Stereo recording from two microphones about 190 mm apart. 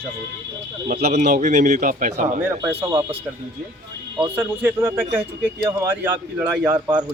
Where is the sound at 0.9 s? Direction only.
35° right (ahead or behind).